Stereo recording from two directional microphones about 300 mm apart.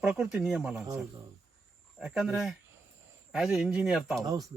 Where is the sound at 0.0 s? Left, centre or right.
Centre.